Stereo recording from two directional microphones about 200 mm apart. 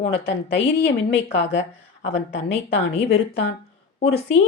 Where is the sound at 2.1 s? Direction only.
30° left (ahead or behind).